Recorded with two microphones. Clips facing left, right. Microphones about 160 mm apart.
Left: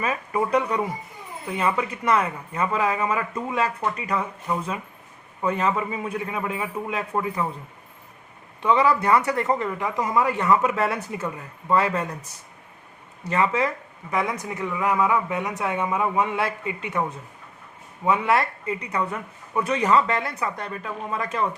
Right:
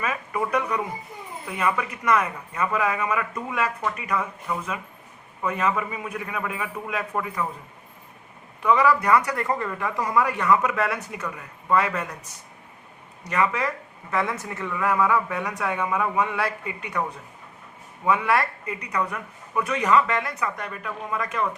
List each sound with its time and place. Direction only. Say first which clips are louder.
0.0 s speech: left 2 dB; 30° left (ahead or behind)
8.6 s speech: even; 30° left (ahead or behind)
13.2 s speech: left 2 dB; 30° left (ahead or behind)